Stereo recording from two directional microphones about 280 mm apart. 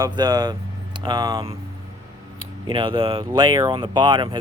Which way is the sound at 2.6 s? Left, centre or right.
Centre.